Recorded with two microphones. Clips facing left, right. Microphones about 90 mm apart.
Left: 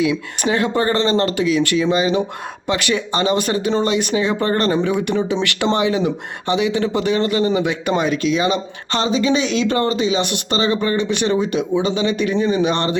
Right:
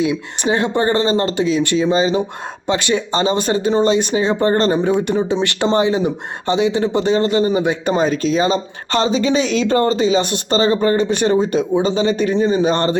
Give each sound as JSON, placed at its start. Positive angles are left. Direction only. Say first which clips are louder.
{"t": 0.0, "sound": "speech", "louder": "even", "side_deg": -25}